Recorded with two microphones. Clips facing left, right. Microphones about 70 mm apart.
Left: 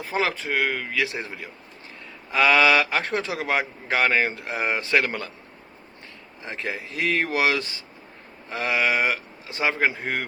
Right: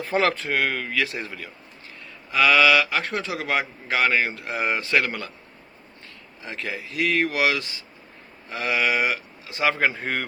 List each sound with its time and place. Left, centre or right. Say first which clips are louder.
0.0 s speech: right 3 dB; centre
1.0 s speech: left 1 dB; left
6.4 s speech: left 1 dB; left
10.0 s a man's voice: even; centre